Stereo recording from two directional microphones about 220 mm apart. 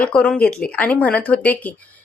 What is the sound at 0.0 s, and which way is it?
A woman's voice, 5° left (ahead or behind).